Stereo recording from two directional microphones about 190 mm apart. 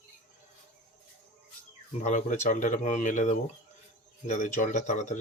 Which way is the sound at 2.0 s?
40° left (ahead or behind).